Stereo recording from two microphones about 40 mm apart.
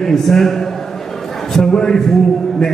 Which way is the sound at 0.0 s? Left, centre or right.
Centre.